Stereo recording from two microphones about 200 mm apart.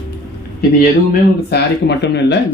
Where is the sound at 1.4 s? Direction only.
55° left (ahead or behind).